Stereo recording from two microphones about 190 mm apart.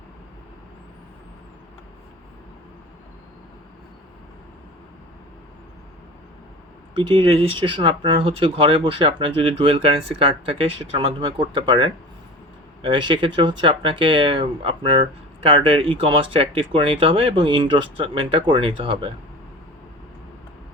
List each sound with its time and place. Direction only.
6.9 s speech: 25° right (ahead or behind)